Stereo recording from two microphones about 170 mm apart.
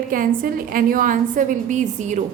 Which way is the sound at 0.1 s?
55° right (ahead or behind).